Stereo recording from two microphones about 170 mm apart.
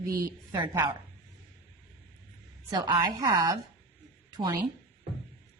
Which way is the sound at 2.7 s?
25° right (ahead or behind).